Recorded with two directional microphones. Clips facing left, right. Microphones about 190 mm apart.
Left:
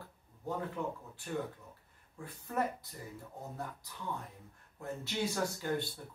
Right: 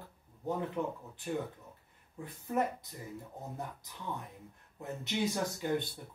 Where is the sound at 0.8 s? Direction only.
20° right (ahead or behind).